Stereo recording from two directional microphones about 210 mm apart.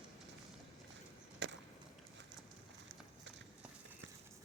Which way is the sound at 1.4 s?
55° right (ahead or behind).